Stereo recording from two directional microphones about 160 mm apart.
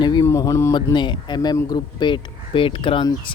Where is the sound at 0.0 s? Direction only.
25° left (ahead or behind).